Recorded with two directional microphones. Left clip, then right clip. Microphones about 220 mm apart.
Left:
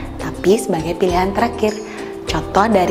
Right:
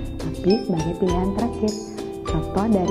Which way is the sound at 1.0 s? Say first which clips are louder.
Left 9 dB; 15° left (ahead or behind).